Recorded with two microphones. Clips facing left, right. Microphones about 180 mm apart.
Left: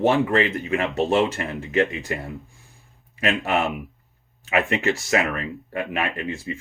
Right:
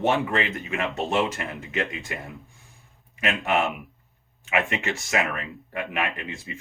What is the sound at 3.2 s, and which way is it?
Speech, 35° left (ahead or behind).